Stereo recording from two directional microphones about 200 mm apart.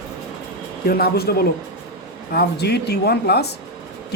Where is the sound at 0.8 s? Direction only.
50° left (ahead or behind).